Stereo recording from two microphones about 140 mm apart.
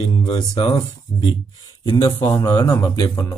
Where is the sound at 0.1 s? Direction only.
35° left (ahead or behind).